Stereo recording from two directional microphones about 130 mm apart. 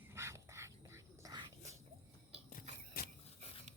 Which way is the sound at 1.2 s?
30° right (ahead or behind).